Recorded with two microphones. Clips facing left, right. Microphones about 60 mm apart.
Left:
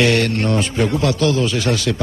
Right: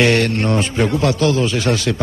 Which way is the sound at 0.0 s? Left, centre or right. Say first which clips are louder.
Right 1 dB; right.